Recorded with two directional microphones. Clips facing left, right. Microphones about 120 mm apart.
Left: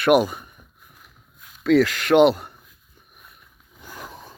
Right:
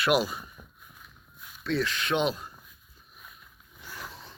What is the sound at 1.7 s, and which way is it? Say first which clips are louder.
Speech: left 12 dB; 90° left.